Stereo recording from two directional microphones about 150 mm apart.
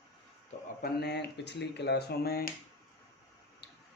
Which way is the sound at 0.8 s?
90° left.